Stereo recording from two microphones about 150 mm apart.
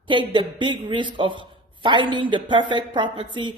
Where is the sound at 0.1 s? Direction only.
30° right (ahead or behind).